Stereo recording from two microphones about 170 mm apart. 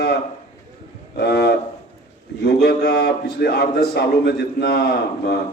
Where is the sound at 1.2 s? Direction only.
70° left (ahead or behind).